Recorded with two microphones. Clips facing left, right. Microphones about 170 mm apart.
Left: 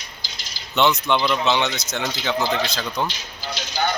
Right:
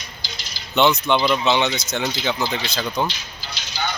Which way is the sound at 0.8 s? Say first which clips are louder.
Right 2 dB; centre (ahead or behind).